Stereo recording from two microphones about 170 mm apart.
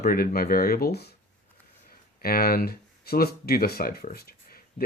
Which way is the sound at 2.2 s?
60° left (ahead or behind).